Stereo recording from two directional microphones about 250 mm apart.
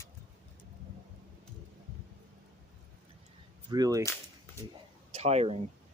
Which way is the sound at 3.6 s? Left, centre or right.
Centre.